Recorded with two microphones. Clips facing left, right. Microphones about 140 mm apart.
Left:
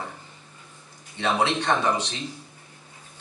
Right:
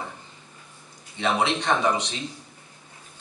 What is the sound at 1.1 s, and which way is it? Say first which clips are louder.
Speech: even; 15° right (ahead or behind).